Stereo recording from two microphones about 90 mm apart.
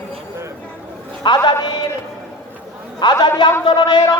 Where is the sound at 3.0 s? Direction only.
50° left (ahead or behind).